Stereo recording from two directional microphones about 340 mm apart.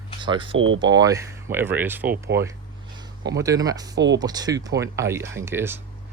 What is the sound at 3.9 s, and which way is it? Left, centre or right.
Speech, right.